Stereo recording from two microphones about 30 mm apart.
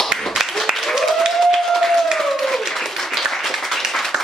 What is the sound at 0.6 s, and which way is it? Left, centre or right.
Applause, centre.